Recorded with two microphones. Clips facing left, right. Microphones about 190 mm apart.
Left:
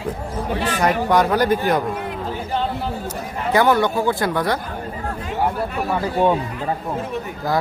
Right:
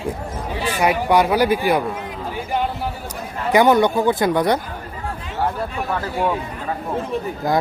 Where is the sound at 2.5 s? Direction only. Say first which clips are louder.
Right 2 dB; 15° right (ahead or behind).